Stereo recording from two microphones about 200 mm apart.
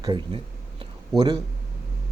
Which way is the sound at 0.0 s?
20° right (ahead or behind).